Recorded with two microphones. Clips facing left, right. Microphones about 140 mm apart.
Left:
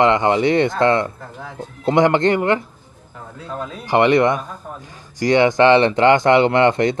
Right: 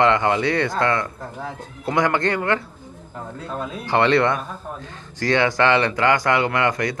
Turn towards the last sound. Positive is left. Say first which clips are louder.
# left 6 dB
turn(degrees=25)  # may be behind; listen again after turning